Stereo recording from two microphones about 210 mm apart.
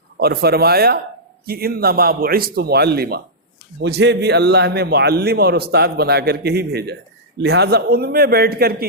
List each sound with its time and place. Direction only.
0.2 s a man's voice: 50° right (ahead or behind)